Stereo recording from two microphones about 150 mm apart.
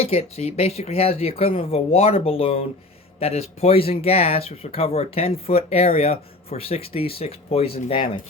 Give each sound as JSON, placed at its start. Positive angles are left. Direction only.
{"t": 0.0, "sound": "speech", "side_deg": 40}